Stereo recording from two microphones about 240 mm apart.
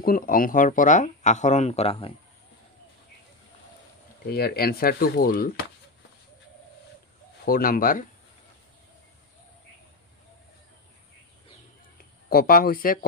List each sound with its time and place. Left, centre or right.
0.0 s speech: left
4.3 s speech: left
7.4 s speech: left
12.0 s speech: left